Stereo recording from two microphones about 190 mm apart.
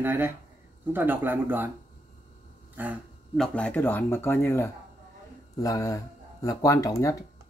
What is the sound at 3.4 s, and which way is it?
Speech, 5° left (ahead or behind).